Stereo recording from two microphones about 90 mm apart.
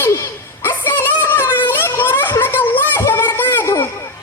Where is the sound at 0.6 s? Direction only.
25° left (ahead or behind).